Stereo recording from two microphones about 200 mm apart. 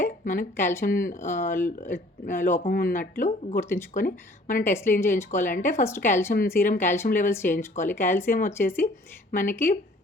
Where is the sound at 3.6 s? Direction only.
10° left (ahead or behind).